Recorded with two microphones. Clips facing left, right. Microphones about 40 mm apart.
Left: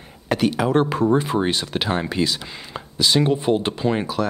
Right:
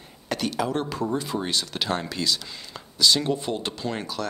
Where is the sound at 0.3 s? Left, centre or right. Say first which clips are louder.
Left 7 dB; left.